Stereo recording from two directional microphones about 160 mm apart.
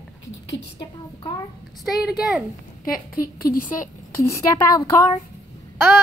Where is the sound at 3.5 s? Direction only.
60° left (ahead or behind).